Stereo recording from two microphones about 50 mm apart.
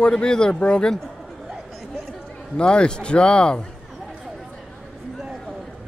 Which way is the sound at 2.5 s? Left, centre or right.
Centre.